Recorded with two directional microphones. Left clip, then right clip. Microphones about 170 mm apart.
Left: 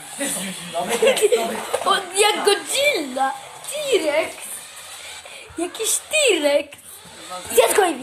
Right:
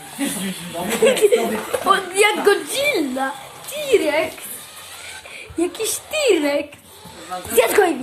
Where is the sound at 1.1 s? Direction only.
10° left (ahead or behind).